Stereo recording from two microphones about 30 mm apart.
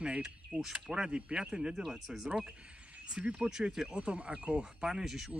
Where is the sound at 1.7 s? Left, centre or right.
Centre.